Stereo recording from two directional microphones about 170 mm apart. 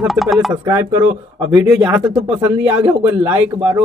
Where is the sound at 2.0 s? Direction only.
10° right (ahead or behind).